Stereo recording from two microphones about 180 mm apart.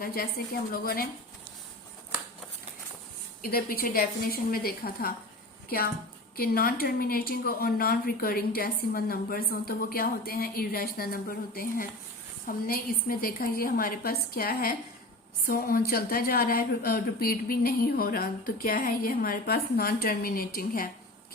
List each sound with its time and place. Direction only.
0.0 s a woman's voice: 55° left (ahead or behind)
3.4 s a woman's voice: 55° left (ahead or behind)